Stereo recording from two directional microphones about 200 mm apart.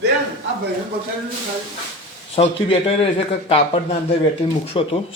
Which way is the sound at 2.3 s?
30° left (ahead or behind).